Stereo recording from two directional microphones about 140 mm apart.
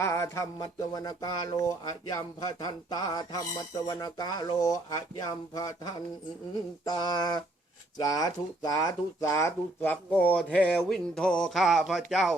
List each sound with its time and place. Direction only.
0.0 s speech: 20° left (ahead or behind); by 12.3 s centre (ahead or behind)